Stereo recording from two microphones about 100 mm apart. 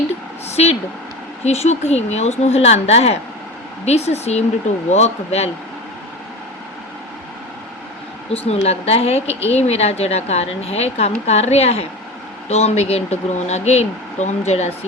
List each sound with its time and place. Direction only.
0.1 s vehicle: 90° left
1.5 s a woman's voice: 90° left
8.3 s a woman's voice: 90° left